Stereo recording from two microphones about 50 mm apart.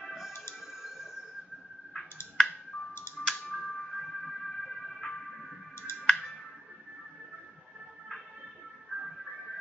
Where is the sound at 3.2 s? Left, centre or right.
Centre.